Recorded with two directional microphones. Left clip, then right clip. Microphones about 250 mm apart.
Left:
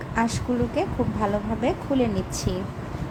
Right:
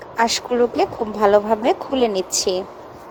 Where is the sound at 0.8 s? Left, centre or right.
Right.